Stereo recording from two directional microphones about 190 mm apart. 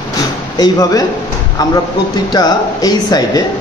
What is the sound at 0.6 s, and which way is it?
Speech, 20° left (ahead or behind).